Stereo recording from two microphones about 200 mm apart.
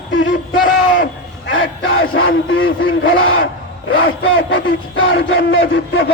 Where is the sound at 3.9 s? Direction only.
75° left (ahead or behind).